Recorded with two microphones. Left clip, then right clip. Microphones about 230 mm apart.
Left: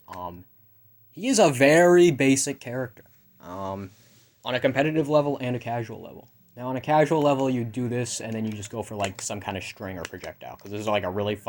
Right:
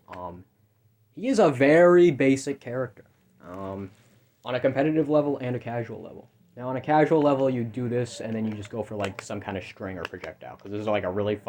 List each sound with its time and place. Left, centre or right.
1.1 s a man's voice: left
3.4 s a sound: left
4.4 s a man's voice: left